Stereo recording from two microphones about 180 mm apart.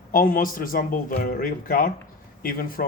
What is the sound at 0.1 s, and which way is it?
Speech, 50° left (ahead or behind).